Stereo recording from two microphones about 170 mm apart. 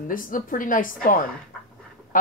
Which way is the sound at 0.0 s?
55° left (ahead or behind).